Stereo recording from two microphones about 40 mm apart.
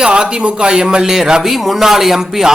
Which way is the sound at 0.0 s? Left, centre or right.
Right.